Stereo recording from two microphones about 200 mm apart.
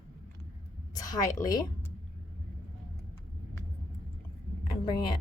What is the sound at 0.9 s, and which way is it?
Speech, 15° left (ahead or behind).